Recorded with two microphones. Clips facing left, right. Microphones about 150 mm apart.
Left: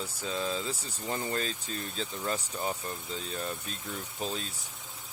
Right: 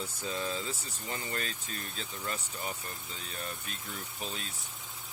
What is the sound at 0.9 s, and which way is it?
Speech, 30° left (ahead or behind).